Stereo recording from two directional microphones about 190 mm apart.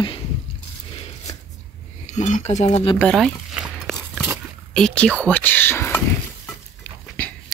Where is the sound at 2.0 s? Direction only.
40° left (ahead or behind).